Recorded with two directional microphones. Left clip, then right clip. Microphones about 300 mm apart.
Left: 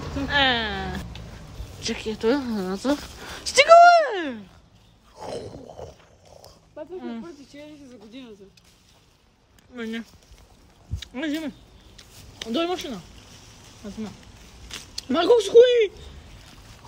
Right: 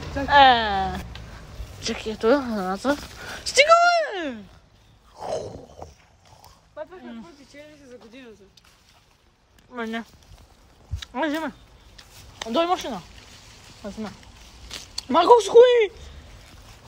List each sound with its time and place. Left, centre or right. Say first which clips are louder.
0.3 s speech: right 7 dB; centre
5.1 s a sound: right 4 dB; centre
7.1 s speech: left 5 dB; centre
9.8 s speech: right 3 dB; centre
12.5 s speech: right 4 dB; centre
13.8 s a sound: right 3 dB; centre
15.0 s speech: right 3 dB; centre